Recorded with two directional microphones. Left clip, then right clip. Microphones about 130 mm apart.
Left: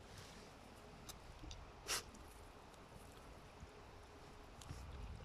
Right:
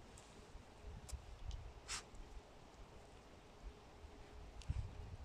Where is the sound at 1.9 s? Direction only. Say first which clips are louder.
Left 5 dB; 80° left.